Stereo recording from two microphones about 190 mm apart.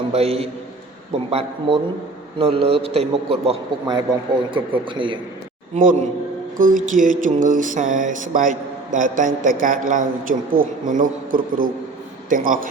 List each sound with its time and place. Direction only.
0.1 s a man's voice: 30° right (ahead or behind)
5.7 s a man's voice: 40° right (ahead or behind)
6.6 s a sound: 45° right (ahead or behind)